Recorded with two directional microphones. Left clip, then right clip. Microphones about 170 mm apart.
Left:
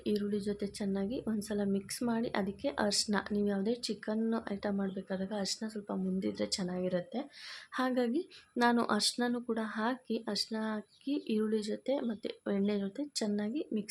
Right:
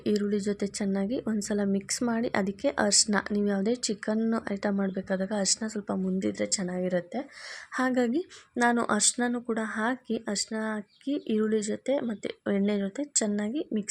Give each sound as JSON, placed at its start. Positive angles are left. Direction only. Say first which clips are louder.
{"t": 0.0, "sound": "speech", "louder": "right 6 dB", "side_deg": -35}